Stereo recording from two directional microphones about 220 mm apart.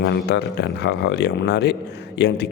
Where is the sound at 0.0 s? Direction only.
50° left (ahead or behind).